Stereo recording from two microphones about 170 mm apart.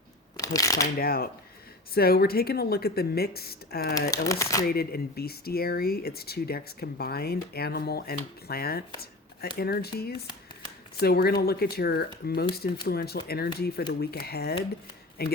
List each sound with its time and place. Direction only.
0.3 s speech: 20° left (ahead or behind)
0.9 s speech: 65° left (ahead or behind)
4.1 s speech: 20° left (ahead or behind)
4.7 s speech: 65° left (ahead or behind)